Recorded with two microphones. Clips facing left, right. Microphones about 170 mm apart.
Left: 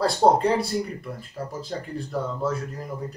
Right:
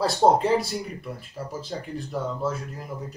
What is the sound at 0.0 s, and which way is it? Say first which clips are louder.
Speech: left 1 dB; centre (ahead or behind).